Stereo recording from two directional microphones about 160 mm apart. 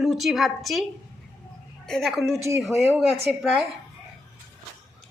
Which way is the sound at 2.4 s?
15° right (ahead or behind).